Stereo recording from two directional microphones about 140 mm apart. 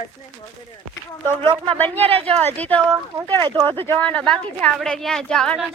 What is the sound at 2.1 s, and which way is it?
Speech, 45° right (ahead or behind).